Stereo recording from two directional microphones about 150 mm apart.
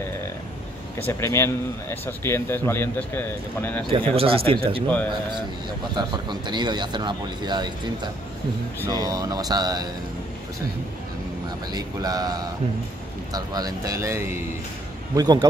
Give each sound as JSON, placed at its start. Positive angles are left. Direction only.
{"t": 0.9, "sound": "speech", "side_deg": 15}
{"t": 3.9, "sound": "speech", "side_deg": -40}
{"t": 5.9, "sound": "speech", "side_deg": -30}
{"t": 11.7, "sound": "speech", "side_deg": -25}
{"t": 15.1, "sound": "speech", "side_deg": -30}